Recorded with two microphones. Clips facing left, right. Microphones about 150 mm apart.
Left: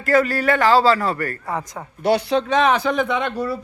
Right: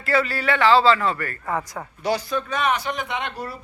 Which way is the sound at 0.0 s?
45° left (ahead or behind).